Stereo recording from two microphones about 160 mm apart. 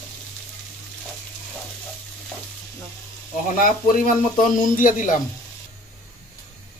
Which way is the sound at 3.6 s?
60° left (ahead or behind).